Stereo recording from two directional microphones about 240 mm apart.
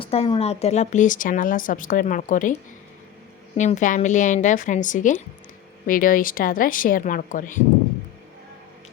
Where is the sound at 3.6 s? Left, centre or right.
Left.